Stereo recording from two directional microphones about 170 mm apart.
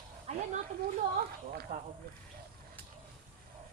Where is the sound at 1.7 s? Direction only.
40° right (ahead or behind).